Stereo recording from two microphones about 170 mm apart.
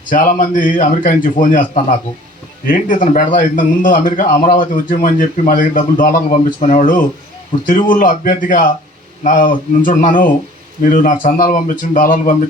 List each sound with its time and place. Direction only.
0.1 s a man's voice: 50° left (ahead or behind)
2.6 s a man's voice: 50° left (ahead or behind)